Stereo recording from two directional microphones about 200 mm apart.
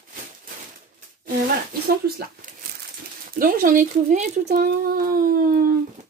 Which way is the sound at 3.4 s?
45° right (ahead or behind).